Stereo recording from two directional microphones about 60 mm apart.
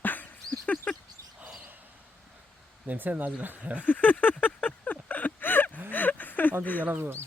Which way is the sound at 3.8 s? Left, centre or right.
Left.